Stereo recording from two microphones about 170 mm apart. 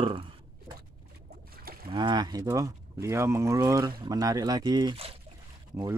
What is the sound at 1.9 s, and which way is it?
Speech, 25° right (ahead or behind).